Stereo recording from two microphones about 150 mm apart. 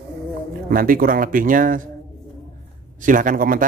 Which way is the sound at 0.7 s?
75° right (ahead or behind).